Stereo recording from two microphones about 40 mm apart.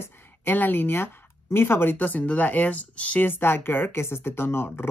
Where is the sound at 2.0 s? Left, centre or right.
Left.